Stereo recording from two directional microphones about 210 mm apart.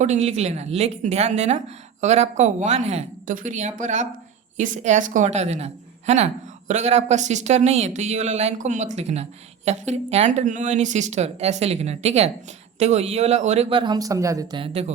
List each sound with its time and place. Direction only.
0.0 s a woman's voice: 35° right (ahead or behind)